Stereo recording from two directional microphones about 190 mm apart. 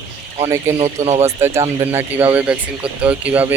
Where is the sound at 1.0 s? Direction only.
35° right (ahead or behind).